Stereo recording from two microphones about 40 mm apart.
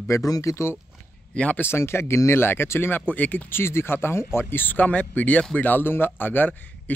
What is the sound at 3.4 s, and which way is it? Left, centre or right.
Speech, left.